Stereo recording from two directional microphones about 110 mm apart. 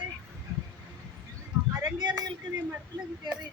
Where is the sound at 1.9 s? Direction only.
40° right (ahead or behind).